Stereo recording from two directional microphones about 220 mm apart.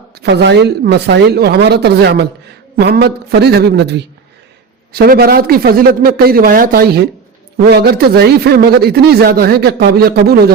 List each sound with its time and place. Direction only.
0.2 s a man's voice: 50° right (ahead or behind)